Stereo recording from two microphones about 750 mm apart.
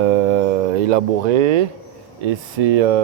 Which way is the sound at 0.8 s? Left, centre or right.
Right.